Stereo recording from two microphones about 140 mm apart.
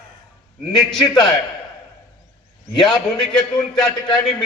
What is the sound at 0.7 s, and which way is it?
Speech, 5° left (ahead or behind).